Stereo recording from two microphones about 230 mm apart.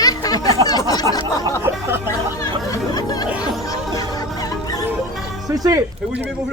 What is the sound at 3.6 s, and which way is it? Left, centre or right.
Music, centre.